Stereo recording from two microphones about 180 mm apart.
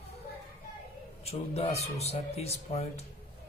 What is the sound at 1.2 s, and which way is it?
Speech, 35° left (ahead or behind).